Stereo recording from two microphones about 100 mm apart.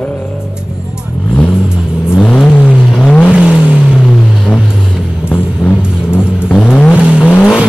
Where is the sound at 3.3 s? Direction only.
10° right (ahead or behind).